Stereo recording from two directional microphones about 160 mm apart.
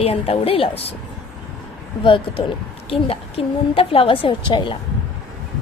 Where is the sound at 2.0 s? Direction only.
30° left (ahead or behind).